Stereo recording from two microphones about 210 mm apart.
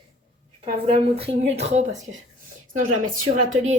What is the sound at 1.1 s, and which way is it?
Speech, 30° right (ahead or behind).